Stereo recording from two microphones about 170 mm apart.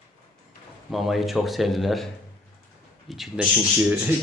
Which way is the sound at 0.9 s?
Centre (ahead or behind).